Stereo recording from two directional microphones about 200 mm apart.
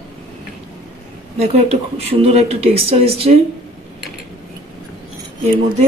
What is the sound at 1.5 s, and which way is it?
Speech, 30° right (ahead or behind).